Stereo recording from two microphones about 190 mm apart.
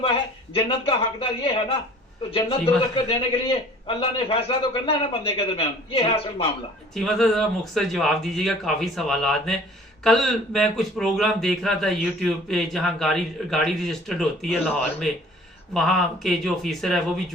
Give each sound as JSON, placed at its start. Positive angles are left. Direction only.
{"t": 0.5, "sound": "a man's voice", "side_deg": 30}
{"t": 6.9, "sound": "a man's voice", "side_deg": 0}
{"t": 15.7, "sound": "a man's voice", "side_deg": 0}